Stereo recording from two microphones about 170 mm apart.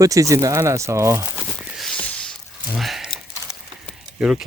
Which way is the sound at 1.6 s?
Centre (ahead or behind).